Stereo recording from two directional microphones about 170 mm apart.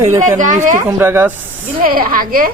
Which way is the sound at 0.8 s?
10° right (ahead or behind).